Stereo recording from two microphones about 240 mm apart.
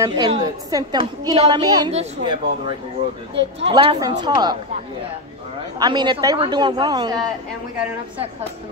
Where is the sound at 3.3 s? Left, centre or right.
Right.